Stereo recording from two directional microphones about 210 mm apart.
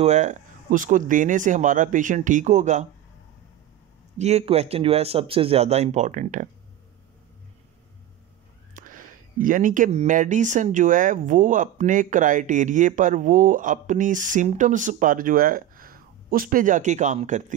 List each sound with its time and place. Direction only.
0.0 s speech: 35° right (ahead or behind)
4.2 s speech: 30° right (ahead or behind)
8.7 s speech: 40° right (ahead or behind)